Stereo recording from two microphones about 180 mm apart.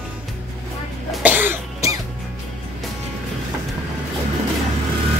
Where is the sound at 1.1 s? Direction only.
10° right (ahead or behind).